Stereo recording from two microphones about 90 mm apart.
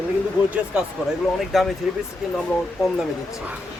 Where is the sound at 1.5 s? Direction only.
Centre (ahead or behind).